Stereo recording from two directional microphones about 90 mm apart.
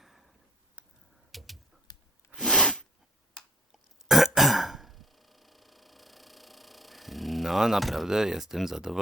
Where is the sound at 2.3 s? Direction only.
5° left (ahead or behind).